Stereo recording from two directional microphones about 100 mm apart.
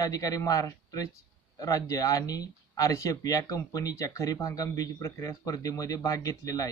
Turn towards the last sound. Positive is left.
turn(degrees=35)  # may be behind; listen again after turning